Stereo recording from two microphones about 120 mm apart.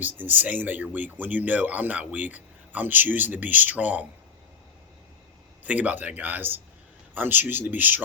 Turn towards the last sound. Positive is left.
turn(degrees=-15)  # may be behind; listen again after turning